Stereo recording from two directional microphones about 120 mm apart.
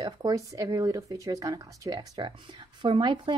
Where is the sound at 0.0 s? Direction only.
30° right (ahead or behind).